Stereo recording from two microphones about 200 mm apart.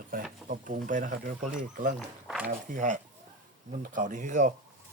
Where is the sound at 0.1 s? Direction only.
40° right (ahead or behind).